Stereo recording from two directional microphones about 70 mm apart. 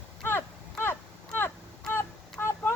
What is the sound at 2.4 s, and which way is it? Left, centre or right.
Vehicle, left.